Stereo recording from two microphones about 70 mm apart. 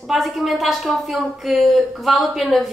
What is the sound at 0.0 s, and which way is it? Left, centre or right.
A woman's voice, centre.